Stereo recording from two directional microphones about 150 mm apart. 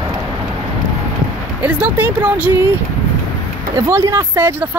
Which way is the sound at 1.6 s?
10° right (ahead or behind).